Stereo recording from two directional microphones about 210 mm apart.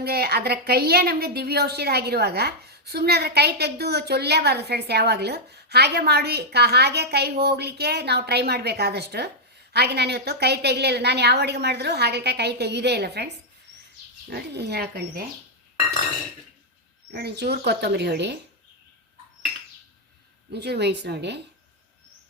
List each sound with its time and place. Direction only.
0.0 s a woman's voice: 50° right (ahead or behind)
17.1 s a woman's voice: 50° right (ahead or behind)
20.5 s a woman's voice: 50° right (ahead or behind)